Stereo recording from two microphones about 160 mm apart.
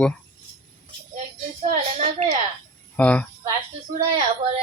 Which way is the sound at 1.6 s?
40° right (ahead or behind).